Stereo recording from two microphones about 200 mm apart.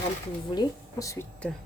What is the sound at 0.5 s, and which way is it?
Speech, 20° left (ahead or behind).